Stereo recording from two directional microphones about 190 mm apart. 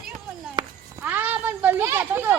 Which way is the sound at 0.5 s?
10° right (ahead or behind).